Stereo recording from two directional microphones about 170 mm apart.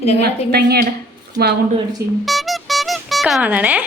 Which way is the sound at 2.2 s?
Centre (ahead or behind).